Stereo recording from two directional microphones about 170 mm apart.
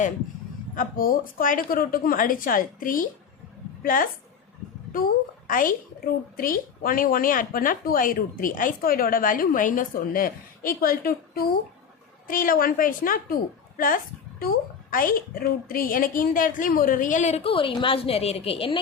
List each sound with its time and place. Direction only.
0.8 s a woman's voice: 55° left (ahead or behind); by 18.8 s 35° left (ahead or behind)